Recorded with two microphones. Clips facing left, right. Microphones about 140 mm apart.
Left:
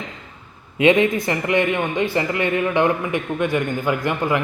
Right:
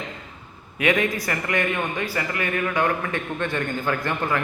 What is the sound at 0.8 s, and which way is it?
A man's voice, 25° left (ahead or behind).